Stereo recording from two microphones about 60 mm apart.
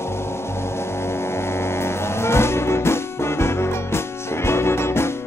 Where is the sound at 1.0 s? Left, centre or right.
Left.